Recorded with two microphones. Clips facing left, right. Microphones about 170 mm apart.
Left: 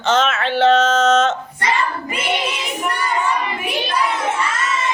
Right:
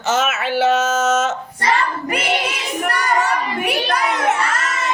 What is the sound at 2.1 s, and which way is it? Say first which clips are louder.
Child singing: right 1 dB; 70° right (ahead or behind).